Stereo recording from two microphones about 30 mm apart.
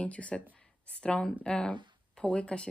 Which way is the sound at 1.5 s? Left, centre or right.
Left.